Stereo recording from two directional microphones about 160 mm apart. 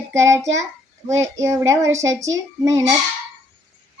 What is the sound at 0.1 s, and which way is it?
A child's voice, 20° right (ahead or behind).